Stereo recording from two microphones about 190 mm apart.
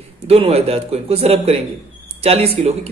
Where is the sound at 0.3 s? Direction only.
30° right (ahead or behind).